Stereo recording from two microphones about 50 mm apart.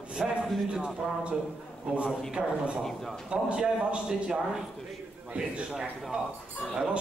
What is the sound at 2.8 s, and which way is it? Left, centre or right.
Speech, centre.